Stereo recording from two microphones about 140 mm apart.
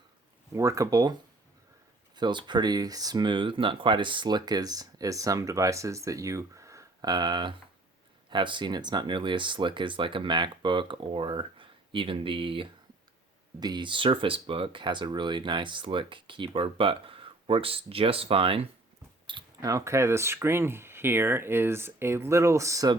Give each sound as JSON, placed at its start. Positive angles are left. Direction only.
{"t": 0.5, "sound": "speech", "side_deg": -20}
{"t": 2.1, "sound": "speech", "side_deg": -30}
{"t": 19.3, "sound": "speech", "side_deg": -25}